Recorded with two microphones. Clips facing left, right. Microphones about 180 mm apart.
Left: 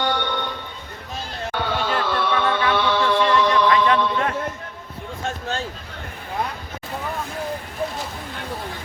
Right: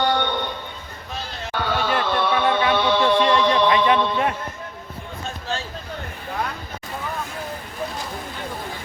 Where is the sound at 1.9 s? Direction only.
15° right (ahead or behind).